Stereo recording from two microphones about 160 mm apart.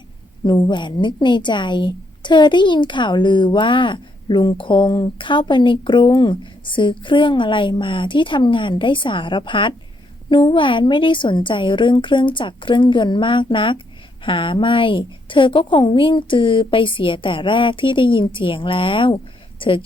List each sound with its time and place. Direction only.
0.4 s a woman's voice: 25° left (ahead or behind)